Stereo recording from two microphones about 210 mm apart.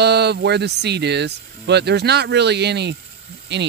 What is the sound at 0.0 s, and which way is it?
Speech, 50° right (ahead or behind).